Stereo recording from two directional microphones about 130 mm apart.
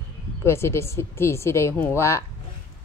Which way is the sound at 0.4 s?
20° left (ahead or behind).